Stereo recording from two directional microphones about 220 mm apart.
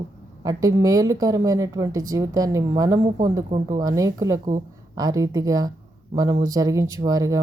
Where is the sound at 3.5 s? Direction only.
35° right (ahead or behind).